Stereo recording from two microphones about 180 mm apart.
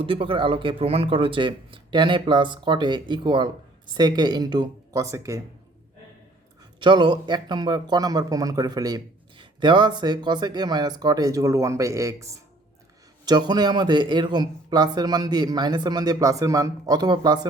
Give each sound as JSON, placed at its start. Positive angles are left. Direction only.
{"t": 0.0, "sound": "speech", "side_deg": -30}
{"t": 6.7, "sound": "speech", "side_deg": -25}